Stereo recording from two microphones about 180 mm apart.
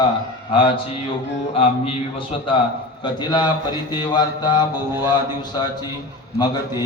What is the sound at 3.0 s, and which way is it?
Mantra, 25° left (ahead or behind).